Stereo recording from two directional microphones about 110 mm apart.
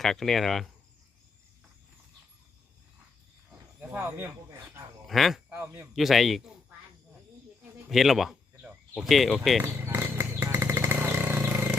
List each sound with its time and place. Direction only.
0.0 s speech: 5° left (ahead or behind)
3.5 s wild animals: 15° right (ahead or behind)
3.9 s speech: 25° right (ahead or behind)
5.0 s speech: centre (ahead or behind)
5.5 s speech: 15° right (ahead or behind)
5.9 s speech: centre (ahead or behind)
7.9 s speech: centre (ahead or behind)
9.8 s motorcycle: 25° right (ahead or behind)